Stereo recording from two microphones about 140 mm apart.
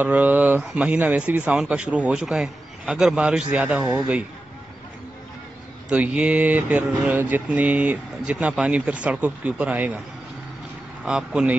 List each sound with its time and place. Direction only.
0.0 s speech: 10° right (ahead or behind)
5.9 s speech: 10° right (ahead or behind)
11.1 s speech: 5° right (ahead or behind)